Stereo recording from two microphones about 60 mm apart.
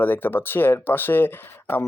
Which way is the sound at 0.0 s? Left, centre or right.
Left.